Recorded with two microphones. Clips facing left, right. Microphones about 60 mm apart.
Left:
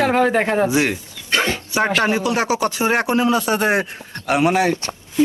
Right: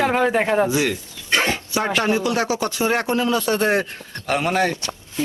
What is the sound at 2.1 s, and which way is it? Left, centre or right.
Speech, left.